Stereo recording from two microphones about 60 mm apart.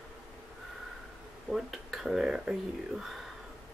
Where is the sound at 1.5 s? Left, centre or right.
Centre.